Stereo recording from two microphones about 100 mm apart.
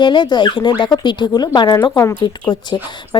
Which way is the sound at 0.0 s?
50° left (ahead or behind).